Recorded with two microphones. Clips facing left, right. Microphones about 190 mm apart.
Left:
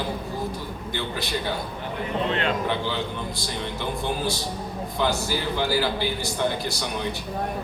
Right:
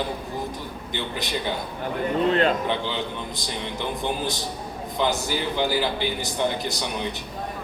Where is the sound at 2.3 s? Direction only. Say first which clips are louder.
Right 6 dB; 40° right (ahead or behind).